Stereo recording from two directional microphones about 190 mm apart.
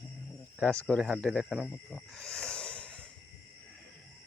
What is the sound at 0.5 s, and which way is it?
Speech, 5° left (ahead or behind).